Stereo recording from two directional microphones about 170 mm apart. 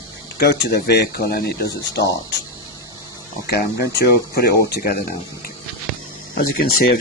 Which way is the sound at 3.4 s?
70° left (ahead or behind).